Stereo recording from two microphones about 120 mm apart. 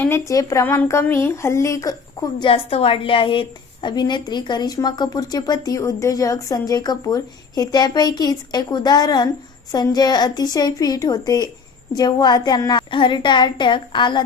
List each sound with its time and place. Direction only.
0.0 s speech: 25° left (ahead or behind)
2.4 s a woman's voice: 55° left (ahead or behind)